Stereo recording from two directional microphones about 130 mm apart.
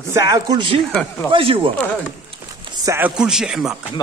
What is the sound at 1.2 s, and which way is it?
Speech, 40° right (ahead or behind).